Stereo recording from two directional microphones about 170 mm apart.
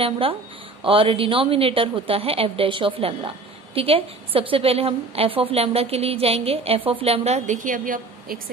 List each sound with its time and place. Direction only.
0.0 s a woman's voice: 30° right (ahead or behind); by 8.4 s 55° right (ahead or behind)